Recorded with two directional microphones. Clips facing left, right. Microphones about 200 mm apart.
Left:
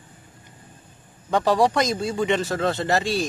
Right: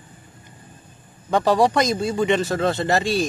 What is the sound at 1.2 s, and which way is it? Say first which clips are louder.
Speech: right 2 dB; 15° right (ahead or behind).